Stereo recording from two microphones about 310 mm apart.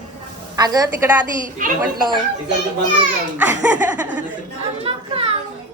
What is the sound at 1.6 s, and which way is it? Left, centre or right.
Speech, right.